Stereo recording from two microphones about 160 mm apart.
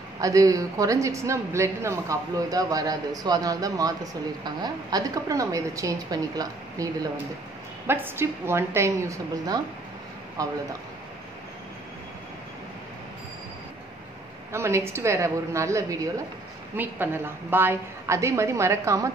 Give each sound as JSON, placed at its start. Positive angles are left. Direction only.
{"t": 0.2, "sound": "a woman's voice", "side_deg": -20}
{"t": 14.5, "sound": "a woman's voice", "side_deg": -15}